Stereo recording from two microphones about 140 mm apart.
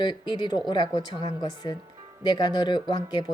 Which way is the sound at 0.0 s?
35° left (ahead or behind).